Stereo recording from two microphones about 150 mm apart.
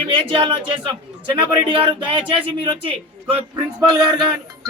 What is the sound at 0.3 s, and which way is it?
Speech, 35° right (ahead or behind).